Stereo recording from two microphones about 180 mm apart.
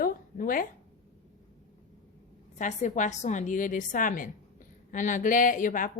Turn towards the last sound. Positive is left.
turn(degrees=50)  # may be behind; listen again after turning